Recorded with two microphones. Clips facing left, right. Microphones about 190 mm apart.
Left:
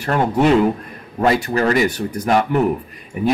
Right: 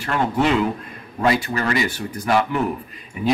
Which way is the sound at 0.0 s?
40° left (ahead or behind).